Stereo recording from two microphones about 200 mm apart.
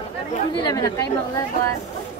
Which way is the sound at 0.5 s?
20° left (ahead or behind).